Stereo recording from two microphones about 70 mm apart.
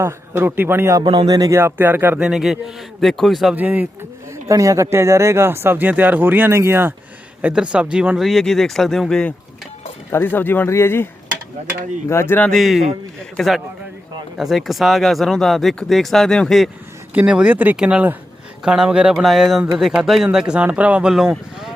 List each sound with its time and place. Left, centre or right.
0.0 s speech: right
0.9 s speech: right
1.5 s speech: right
2.1 s a man's voice: centre
3.5 s speech: right
4.4 s speech: right
7.5 s speech: centre
8.2 s a man's voice: centre
10.1 s speech: left
12.5 s a man's voice: centre
17.2 s speech: centre
17.7 s speech: centre
19.1 s a man's voice: centre
21.1 s speech: centre